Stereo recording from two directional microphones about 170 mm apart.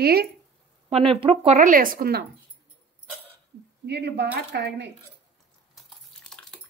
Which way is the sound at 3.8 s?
80° right.